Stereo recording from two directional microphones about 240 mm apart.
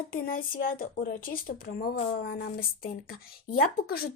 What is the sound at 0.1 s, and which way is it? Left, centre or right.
A woman's voice, left.